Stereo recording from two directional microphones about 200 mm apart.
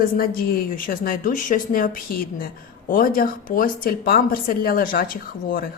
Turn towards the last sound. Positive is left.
turn(degrees=45)  # may be behind; listen again after turning